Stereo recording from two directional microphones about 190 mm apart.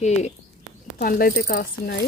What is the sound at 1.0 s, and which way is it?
Speech, 50° left (ahead or behind).